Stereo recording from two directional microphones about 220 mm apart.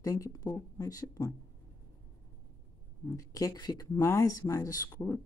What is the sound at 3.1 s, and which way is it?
Speech, 15° left (ahead or behind).